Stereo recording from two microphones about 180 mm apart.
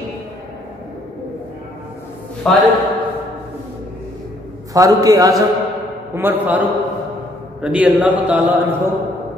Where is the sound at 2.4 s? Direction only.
5° left (ahead or behind).